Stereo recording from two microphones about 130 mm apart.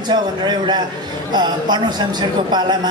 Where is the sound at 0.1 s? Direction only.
35° right (ahead or behind).